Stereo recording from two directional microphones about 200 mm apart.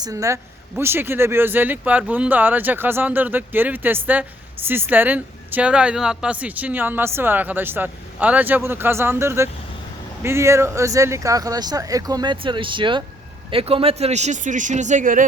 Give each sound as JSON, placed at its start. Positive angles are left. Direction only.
{"t": 0.0, "sound": "a man's voice", "side_deg": -15}